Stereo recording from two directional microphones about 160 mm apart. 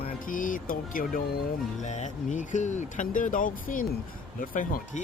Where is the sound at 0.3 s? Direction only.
55° left (ahead or behind).